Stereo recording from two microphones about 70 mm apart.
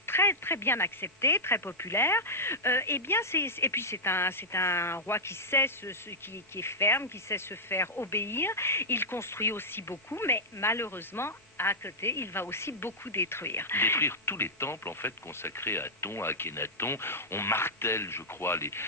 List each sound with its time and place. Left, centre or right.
0.0 s speech: left